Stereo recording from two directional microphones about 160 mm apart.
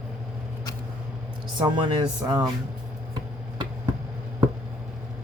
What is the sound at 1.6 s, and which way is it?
Speech, 30° right (ahead or behind).